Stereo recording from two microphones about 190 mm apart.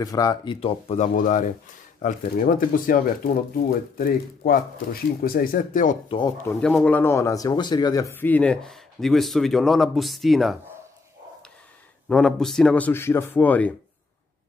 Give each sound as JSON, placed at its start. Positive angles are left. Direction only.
{"t": 0.0, "sound": "speech", "side_deg": 20}
{"t": 0.6, "sound": "speech", "side_deg": 30}
{"t": 1.1, "sound": "speech", "side_deg": 45}
{"t": 4.0, "sound": "speech", "side_deg": 50}
{"t": 6.0, "sound": "speech", "side_deg": 25}
{"t": 6.4, "sound": "speech", "side_deg": 5}
{"t": 12.1, "sound": "a man's voice", "side_deg": 5}